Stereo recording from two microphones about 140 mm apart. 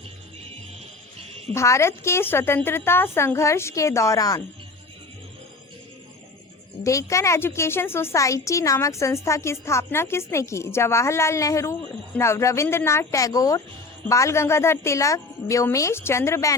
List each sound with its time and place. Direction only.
1.5 s a woman's voice: 20° left (ahead or behind)
6.8 s a woman's voice: 20° left (ahead or behind)